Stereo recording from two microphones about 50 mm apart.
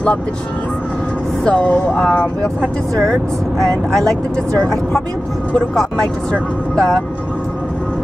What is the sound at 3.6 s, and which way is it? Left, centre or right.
Speech, centre.